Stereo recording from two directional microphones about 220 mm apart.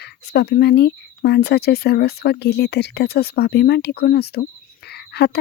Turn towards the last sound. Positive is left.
turn(degrees=50)  # may be behind; listen again after turning